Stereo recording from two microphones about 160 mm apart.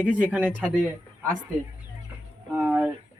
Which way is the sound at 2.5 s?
5° right (ahead or behind).